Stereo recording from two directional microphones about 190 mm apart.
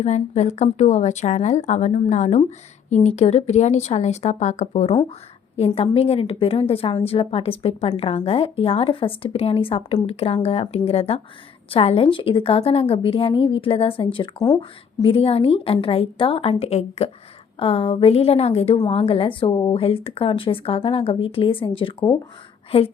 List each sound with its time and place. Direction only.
0.0 s a woman's voice: 35° left (ahead or behind)